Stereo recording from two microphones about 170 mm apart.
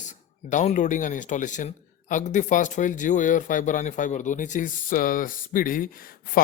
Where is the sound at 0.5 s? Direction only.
45° left (ahead or behind).